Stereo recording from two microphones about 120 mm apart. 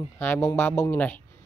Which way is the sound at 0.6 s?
20° left (ahead or behind).